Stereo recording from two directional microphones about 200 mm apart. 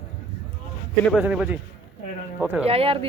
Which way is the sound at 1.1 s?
5° right (ahead or behind).